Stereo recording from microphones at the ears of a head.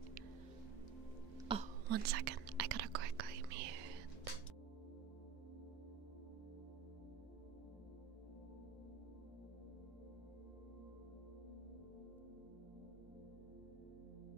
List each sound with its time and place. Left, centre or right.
1.5 s whispering: right